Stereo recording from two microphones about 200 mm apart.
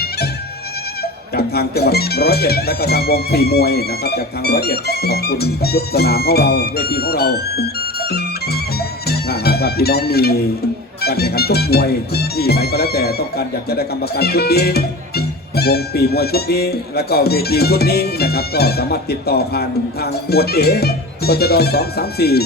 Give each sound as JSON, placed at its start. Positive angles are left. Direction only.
{"t": 1.4, "sound": "speech", "side_deg": 50}
{"t": 9.0, "sound": "music", "side_deg": 50}
{"t": 11.0, "sound": "speech", "side_deg": 50}